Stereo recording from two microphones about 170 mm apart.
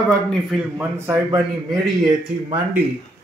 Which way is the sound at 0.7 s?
10° right (ahead or behind).